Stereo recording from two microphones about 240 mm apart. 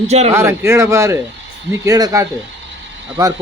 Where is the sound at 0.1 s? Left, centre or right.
Right.